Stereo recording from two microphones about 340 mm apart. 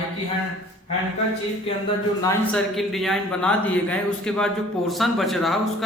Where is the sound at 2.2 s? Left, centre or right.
Centre.